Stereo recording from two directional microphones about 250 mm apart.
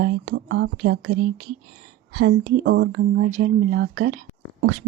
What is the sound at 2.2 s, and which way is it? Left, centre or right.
A woman's voice, right.